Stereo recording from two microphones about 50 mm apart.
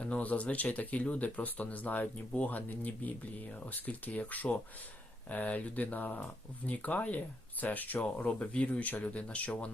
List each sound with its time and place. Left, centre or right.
0.0 s speech: left